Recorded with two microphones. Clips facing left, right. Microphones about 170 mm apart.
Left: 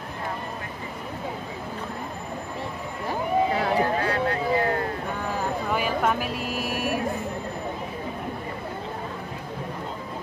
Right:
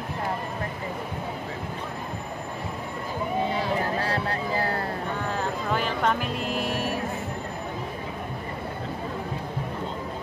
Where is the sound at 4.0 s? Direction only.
35° right (ahead or behind).